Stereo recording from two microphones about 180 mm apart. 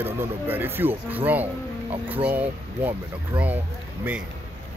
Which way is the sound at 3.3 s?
30° right (ahead or behind).